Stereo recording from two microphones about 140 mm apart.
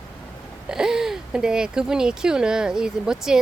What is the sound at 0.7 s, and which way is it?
Speech, 5° right (ahead or behind).